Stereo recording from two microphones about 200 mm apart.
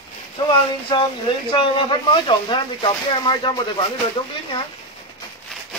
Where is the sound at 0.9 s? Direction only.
25° left (ahead or behind).